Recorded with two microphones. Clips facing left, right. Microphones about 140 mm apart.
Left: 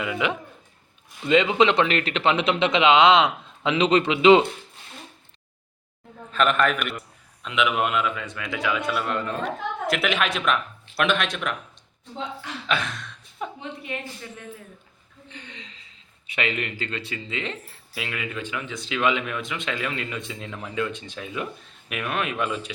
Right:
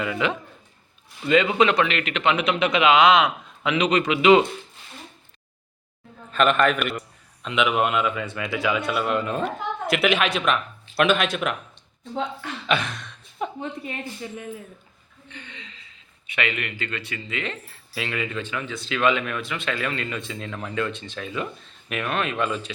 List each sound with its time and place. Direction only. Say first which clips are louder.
0.0 s a man's voice: right 1 dB; 10° left (ahead or behind)
1.9 s a man's voice: left 1 dB; 35° left (ahead or behind)
6.3 s speech: right 2 dB; centre (ahead or behind)
12.6 s speech: right 2 dB; centre (ahead or behind)
13.6 s a woman's voice: right 2 dB; 35° right (ahead or behind)
15.3 s a man's voice: even; 35° left (ahead or behind)
17.9 s speech: right 3 dB; 10° left (ahead or behind)